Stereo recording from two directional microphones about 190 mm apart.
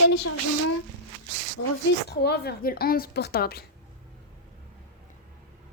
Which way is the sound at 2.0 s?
60° left (ahead or behind).